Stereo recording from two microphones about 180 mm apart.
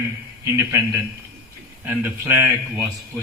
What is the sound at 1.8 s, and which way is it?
Speech, 10° right (ahead or behind).